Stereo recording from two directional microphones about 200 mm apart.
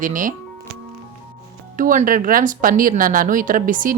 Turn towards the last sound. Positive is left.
turn(degrees=-40)  # may be behind; listen again after turning